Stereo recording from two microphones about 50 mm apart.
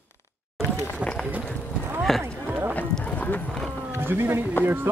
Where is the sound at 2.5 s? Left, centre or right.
Right.